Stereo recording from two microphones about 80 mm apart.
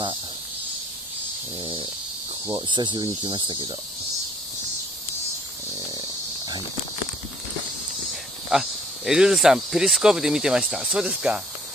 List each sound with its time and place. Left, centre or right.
2.5 s cricket: right
5.9 s dog: right
8.1 s speech: centre